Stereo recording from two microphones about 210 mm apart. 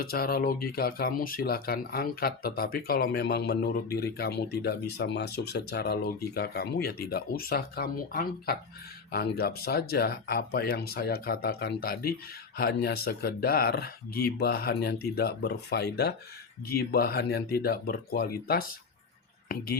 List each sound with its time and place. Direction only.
0.0 s speech: 45° left (ahead or behind)